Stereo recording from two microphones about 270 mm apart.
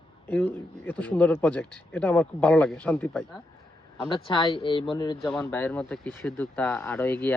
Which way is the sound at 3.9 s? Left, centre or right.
Centre.